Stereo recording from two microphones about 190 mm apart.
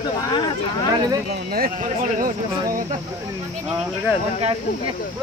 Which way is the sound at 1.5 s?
50° right (ahead or behind).